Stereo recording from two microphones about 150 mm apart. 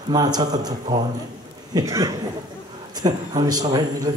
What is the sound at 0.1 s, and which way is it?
Speech, 25° right (ahead or behind).